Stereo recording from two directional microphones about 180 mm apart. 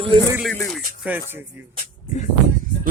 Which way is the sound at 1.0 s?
10° right (ahead or behind).